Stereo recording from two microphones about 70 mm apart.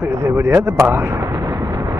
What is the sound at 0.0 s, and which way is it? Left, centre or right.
Speech, right.